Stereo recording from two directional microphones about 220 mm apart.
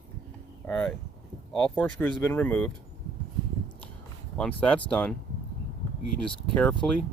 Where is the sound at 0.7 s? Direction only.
5° left (ahead or behind).